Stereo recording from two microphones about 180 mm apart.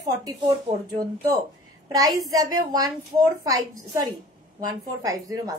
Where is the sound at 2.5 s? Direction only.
20° right (ahead or behind).